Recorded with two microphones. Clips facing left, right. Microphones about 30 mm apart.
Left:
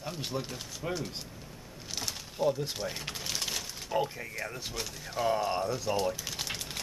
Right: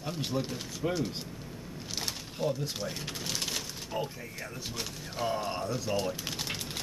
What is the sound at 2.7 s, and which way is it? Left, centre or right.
Speech, centre.